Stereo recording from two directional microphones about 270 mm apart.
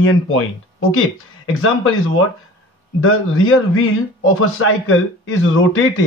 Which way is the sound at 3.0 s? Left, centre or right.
Left.